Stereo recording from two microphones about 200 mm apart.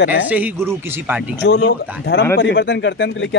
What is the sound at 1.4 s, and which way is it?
Speech, 60° left (ahead or behind).